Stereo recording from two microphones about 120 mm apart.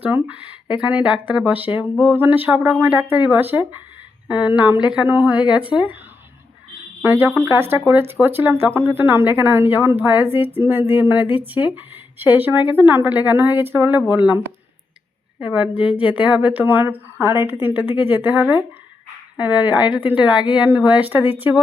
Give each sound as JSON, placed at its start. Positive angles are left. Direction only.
{"t": 0.0, "sound": "speech", "side_deg": -15}
{"t": 7.0, "sound": "a woman's voice", "side_deg": -20}